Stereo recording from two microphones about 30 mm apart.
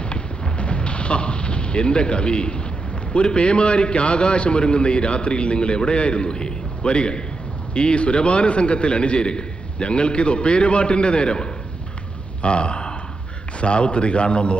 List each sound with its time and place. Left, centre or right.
0.0 s artillery fire: left
3.2 s a man's voice: left